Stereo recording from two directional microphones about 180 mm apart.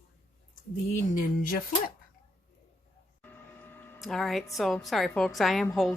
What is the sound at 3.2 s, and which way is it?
Printer, 10° left (ahead or behind).